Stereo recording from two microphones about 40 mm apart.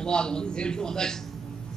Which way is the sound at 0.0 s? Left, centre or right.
Left.